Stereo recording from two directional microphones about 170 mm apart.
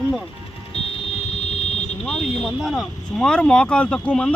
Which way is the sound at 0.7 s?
35° left (ahead or behind).